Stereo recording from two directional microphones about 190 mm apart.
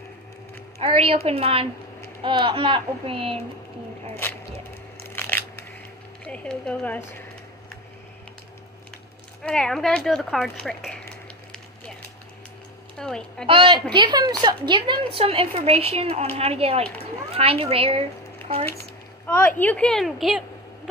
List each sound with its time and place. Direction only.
0.7 s a woman's voice: 30° right (ahead or behind)
5.0 s crushing: 10° left (ahead or behind)
6.2 s speech: 5° left (ahead or behind)
9.4 s speech: 5° left (ahead or behind)
12.9 s a woman's voice: 5° left (ahead or behind)
13.5 s a child's voice: 25° right (ahead or behind)
18.7 s a woman's voice: 10° left (ahead or behind)